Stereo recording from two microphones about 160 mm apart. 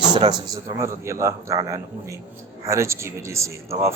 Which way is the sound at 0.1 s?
30° right (ahead or behind).